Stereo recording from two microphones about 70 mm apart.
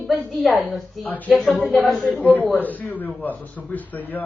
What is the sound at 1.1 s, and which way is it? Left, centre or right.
Speech, left.